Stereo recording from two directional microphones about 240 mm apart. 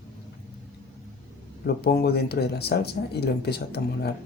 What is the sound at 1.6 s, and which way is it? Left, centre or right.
Speech, left.